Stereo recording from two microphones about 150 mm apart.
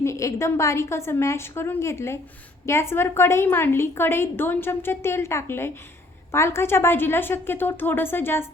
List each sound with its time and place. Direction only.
0.0 s a woman's voice: 20° left (ahead or behind)